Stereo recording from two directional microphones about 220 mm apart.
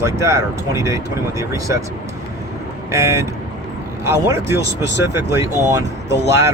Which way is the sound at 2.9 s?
10° right (ahead or behind).